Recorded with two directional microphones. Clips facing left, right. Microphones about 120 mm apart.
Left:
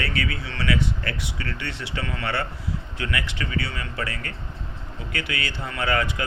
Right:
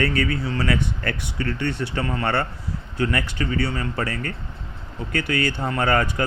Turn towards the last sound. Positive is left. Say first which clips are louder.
# right 4 dB
turn(degrees=-45)  # may be behind; listen again after turning